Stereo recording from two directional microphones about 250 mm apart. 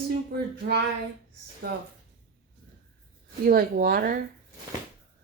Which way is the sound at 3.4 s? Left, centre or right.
Right.